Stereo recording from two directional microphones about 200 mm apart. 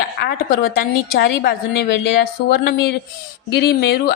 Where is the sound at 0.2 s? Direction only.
50° left (ahead or behind).